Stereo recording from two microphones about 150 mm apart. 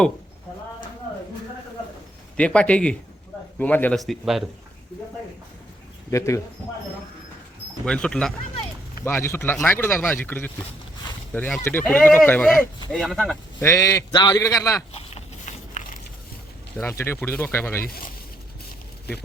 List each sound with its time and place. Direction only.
2.3 s speech: 5° left (ahead or behind)
3.9 s speech: centre (ahead or behind)
6.1 s a man's voice: 20° left (ahead or behind)
7.9 s speech: 5° left (ahead or behind)
13.6 s a man's voice: 20° left (ahead or behind)
14.9 s biting: 50° left (ahead or behind)
16.8 s speech: 15° left (ahead or behind)